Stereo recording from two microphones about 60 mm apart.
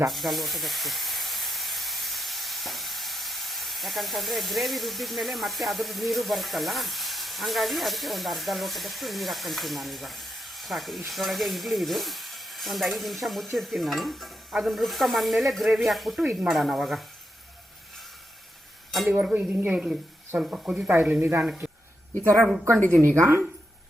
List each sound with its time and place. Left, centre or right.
0.1 s speech: centre
11.1 s sizzle: centre
19.2 s speech: right
20.9 s speech: right
22.9 s a woman's voice: right